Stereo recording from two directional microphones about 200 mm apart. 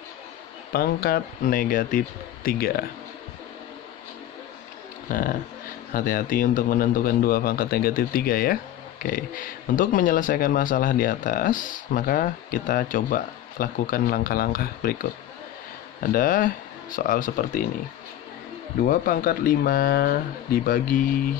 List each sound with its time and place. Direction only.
0.7 s speech: 50° left (ahead or behind)
5.1 s speech: 45° left (ahead or behind)
18.9 s speech: 45° left (ahead or behind)